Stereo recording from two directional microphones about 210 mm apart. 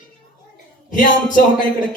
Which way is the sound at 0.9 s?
40° left (ahead or behind).